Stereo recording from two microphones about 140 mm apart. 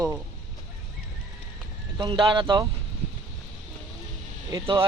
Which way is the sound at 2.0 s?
35° right (ahead or behind).